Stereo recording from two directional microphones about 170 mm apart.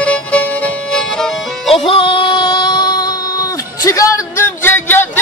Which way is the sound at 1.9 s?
30° left (ahead or behind).